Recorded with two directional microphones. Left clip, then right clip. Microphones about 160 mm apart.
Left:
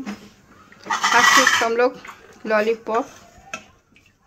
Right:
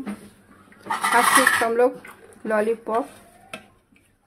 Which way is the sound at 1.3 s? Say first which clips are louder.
Left 2 dB; 35° right (ahead or behind).